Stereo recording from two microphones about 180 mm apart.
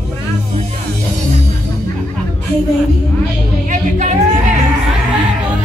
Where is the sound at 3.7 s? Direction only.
45° right (ahead or behind).